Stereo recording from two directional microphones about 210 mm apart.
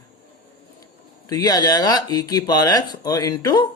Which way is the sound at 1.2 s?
20° left (ahead or behind).